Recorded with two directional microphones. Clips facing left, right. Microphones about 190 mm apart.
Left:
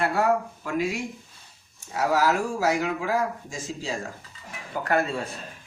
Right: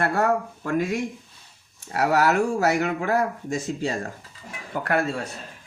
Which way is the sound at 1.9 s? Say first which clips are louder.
Right 2 dB; 65° right (ahead or behind).